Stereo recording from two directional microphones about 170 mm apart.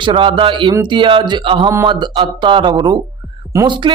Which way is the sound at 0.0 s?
30° right (ahead or behind).